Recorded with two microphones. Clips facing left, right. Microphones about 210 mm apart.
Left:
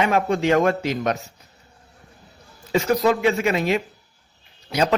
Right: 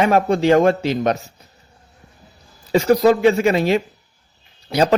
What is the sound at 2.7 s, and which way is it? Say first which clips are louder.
Speech: right 5 dB; 35° right (ahead or behind).